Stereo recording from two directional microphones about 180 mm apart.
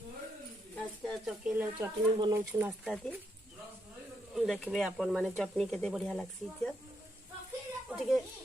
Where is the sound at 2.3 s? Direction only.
15° right (ahead or behind).